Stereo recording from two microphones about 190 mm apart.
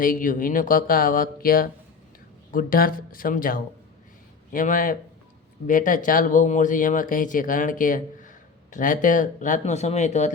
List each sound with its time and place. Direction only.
0.0 s speech: 45° left (ahead or behind)